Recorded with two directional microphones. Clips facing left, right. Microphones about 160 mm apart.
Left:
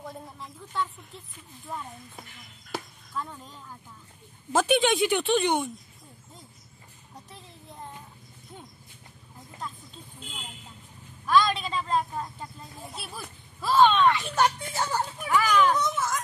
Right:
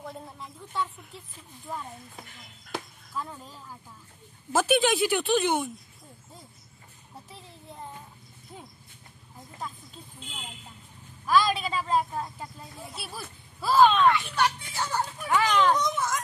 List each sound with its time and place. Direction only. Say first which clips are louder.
0.0 s a woman's voice: even; centre (ahead or behind)
2.7 s a woman's voice: even; centre (ahead or behind)
7.2 s a woman's voice: right 1 dB; centre (ahead or behind)
9.6 s a woman's voice: even; 10° right (ahead or behind)
14.1 s speech: left 2 dB; 45° left (ahead or behind)
15.2 s speech: even; 25° right (ahead or behind)
15.8 s a woman's voice: even; centre (ahead or behind)